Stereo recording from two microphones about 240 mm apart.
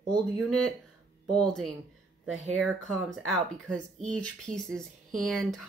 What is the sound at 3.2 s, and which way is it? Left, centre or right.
Speech, centre.